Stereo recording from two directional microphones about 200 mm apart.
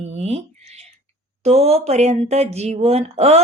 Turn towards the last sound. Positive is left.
turn(degrees=-30)  # may be behind; listen again after turning